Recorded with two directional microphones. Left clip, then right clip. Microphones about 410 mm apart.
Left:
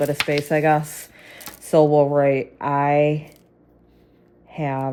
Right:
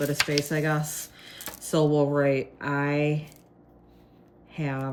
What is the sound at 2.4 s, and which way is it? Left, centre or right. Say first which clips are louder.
Speech: left 8 dB; centre.